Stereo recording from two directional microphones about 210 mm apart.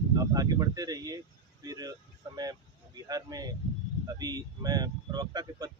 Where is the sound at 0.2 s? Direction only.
20° right (ahead or behind).